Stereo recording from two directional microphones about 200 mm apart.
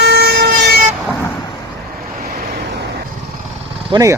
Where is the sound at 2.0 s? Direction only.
50° right (ahead or behind).